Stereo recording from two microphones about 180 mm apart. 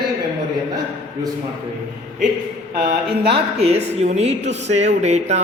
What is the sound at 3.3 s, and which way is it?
A woman's voice, 35° right (ahead or behind).